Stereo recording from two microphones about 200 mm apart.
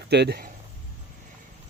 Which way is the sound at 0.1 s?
55° right (ahead or behind).